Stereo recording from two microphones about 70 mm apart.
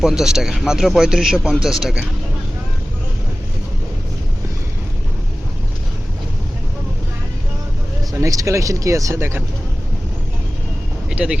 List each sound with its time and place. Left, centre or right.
0.0 s speech: centre
8.1 s speech: right
11.1 s speech: centre